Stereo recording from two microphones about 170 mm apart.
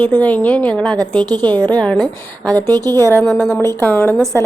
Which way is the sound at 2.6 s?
20° right (ahead or behind).